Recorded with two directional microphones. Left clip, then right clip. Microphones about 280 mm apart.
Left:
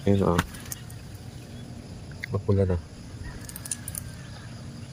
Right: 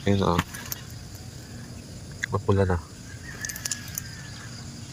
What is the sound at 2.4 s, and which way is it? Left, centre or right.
Speech, centre.